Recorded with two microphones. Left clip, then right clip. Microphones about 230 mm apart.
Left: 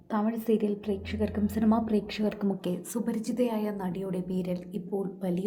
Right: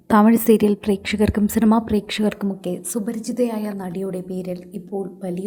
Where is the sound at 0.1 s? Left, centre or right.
Right.